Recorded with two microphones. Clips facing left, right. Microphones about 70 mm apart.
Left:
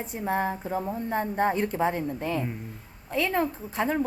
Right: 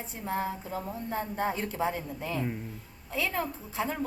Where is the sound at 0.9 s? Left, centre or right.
Left.